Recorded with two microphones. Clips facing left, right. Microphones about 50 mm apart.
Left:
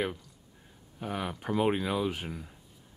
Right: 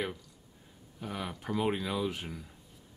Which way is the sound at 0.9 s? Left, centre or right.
Left.